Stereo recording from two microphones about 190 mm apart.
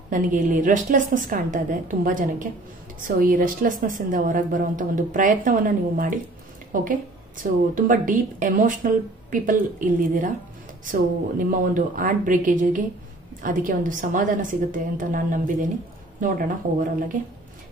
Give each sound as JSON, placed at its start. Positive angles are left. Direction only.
{"t": 0.1, "sound": "a woman's voice", "side_deg": -45}